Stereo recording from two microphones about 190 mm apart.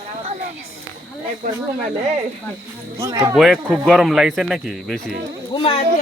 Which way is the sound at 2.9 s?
15° right (ahead or behind).